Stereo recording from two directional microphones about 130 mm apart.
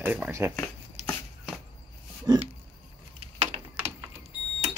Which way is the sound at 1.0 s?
55° right (ahead or behind).